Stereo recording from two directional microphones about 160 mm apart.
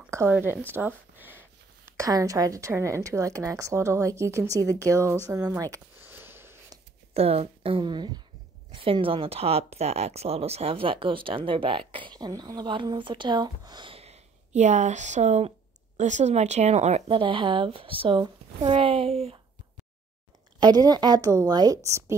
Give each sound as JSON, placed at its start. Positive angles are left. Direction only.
{"t": 0.1, "sound": "a woman's voice", "side_deg": -15}
{"t": 4.8, "sound": "a sound", "side_deg": -20}
{"t": 7.2, "sound": "speech", "side_deg": -40}
{"t": 20.5, "sound": "a woman's voice", "side_deg": -25}